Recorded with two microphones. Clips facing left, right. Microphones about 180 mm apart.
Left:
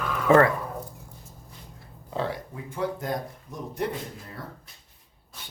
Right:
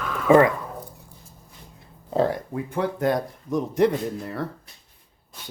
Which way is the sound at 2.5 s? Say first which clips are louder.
Right 4 dB; 65° right (ahead or behind).